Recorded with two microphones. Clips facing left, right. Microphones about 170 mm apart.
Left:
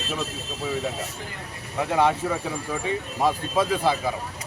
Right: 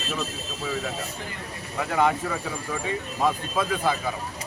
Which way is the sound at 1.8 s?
25° left (ahead or behind).